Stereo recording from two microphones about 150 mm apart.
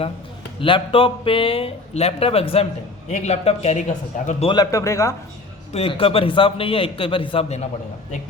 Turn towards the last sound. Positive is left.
turn(degrees=40)  # may be behind; listen again after turning